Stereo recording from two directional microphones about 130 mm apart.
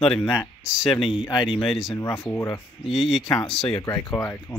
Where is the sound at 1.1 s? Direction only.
35° left (ahead or behind).